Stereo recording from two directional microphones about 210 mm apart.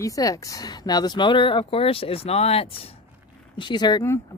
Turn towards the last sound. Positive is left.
turn(degrees=15)  # may be behind; listen again after turning